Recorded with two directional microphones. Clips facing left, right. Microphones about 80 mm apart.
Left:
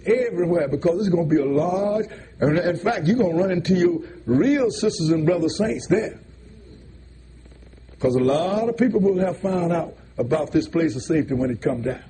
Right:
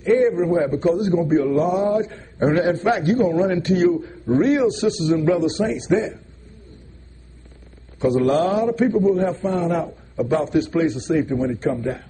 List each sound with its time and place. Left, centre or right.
0.0 s a man's voice: right
8.0 s a man's voice: right